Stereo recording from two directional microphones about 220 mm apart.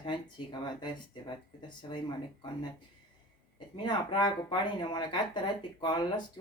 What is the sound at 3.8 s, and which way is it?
Speech, 20° left (ahead or behind).